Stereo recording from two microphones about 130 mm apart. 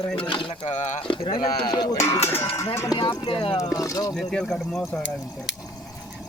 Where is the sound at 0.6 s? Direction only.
65° left (ahead or behind).